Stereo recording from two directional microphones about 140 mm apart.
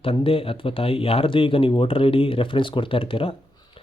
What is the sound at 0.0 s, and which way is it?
Speech, 40° left (ahead or behind).